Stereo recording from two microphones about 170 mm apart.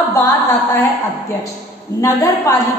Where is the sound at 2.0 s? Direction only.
15° left (ahead or behind).